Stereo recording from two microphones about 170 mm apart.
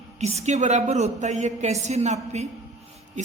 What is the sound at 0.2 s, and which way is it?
A woman's voice, 40° right (ahead or behind).